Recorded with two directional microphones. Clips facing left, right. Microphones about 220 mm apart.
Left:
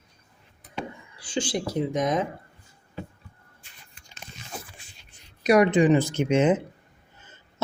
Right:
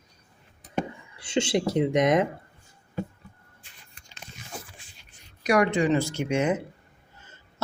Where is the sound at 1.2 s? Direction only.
25° right (ahead or behind).